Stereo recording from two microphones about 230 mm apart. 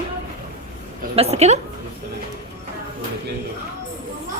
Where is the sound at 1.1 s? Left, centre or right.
Right.